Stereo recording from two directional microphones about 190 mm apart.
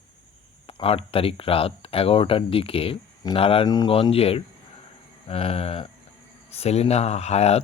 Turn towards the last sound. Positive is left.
turn(degrees=35)  # may be behind; listen again after turning